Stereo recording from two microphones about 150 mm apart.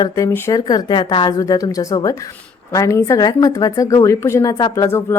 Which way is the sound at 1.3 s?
20° left (ahead or behind).